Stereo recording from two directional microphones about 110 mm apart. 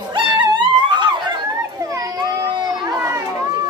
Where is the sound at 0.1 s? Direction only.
45° right (ahead or behind).